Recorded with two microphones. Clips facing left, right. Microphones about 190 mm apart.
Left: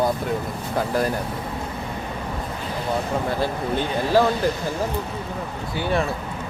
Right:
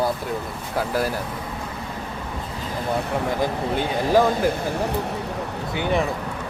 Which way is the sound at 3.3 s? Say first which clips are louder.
Even; 15° right (ahead or behind).